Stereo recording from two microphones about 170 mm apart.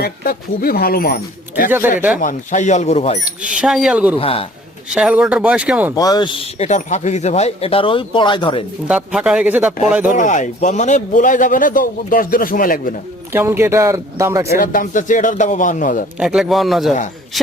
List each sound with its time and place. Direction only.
0.0 s speech: 65° left (ahead or behind)
2.2 s speech: 45° left (ahead or behind)
3.2 s speech: 5° right (ahead or behind)
4.2 s speech: 35° left (ahead or behind)
4.9 s speech: 5° right (ahead or behind)
5.9 s speech: 20° left (ahead or behind)
8.9 s speech: 5° right (ahead or behind)
10.1 s speech: 50° left (ahead or behind)
13.3 s speech: 15° right (ahead or behind)
14.6 s speech: 55° left (ahead or behind)
16.1 s speech: centre (ahead or behind)